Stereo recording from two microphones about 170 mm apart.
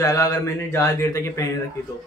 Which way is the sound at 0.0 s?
20° left (ahead or behind).